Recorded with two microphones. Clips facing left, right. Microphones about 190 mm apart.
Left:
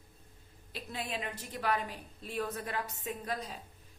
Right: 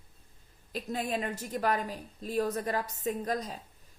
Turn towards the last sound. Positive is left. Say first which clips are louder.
# right 6 dB
turn(degrees=-40)  # may be behind; listen again after turning